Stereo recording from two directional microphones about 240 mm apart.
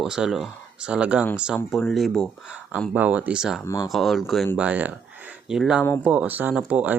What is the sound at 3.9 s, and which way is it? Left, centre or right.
Speech, centre.